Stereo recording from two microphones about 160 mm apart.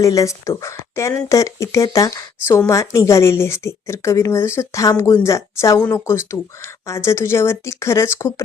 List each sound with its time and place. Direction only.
0.0 s speech: 20° left (ahead or behind)